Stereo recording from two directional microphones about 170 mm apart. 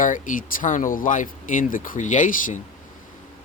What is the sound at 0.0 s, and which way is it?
Speech, 50° left (ahead or behind).